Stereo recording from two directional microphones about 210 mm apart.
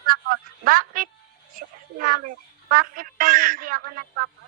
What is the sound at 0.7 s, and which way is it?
A woman's voice, 45° right (ahead or behind).